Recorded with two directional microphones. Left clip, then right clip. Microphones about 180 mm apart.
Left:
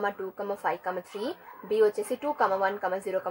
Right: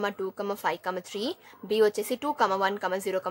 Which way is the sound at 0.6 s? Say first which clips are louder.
Left 1 dB; 40° right (ahead or behind).